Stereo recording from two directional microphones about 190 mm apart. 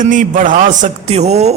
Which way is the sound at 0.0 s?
45° right (ahead or behind).